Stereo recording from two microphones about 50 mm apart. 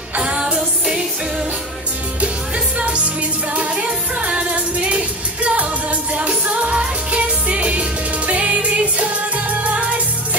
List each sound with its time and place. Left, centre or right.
0.2 s music: centre
3.5 s music: right